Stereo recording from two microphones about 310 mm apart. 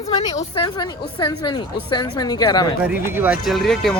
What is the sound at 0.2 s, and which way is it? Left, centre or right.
Speech, centre.